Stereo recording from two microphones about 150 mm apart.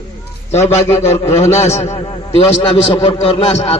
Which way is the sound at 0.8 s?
45° left (ahead or behind).